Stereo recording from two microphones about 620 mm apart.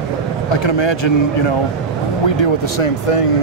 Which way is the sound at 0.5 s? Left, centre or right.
Left.